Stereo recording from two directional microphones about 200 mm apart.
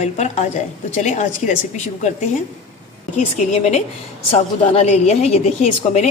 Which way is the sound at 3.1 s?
35° left (ahead or behind).